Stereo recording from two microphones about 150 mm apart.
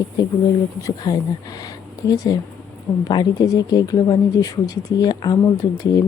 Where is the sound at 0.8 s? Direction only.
25° left (ahead or behind).